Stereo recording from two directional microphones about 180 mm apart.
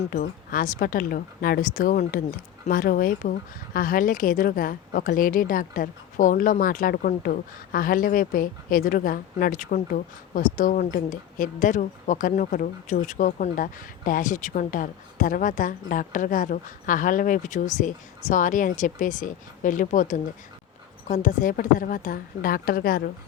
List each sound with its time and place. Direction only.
0.1 s a woman's voice: 50° left (ahead or behind)